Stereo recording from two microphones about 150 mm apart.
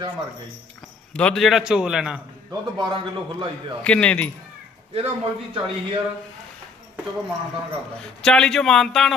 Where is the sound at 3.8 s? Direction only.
5° left (ahead or behind).